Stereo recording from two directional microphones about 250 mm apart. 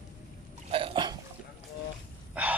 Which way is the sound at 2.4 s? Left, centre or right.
Centre.